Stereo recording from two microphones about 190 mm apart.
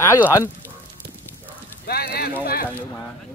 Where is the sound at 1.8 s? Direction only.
55° left (ahead or behind).